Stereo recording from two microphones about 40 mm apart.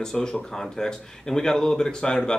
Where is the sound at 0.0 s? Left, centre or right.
Centre.